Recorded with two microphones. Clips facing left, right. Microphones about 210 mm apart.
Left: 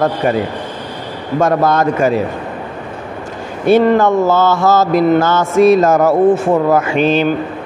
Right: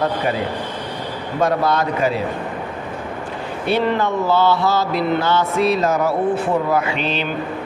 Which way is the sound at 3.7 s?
45° left (ahead or behind).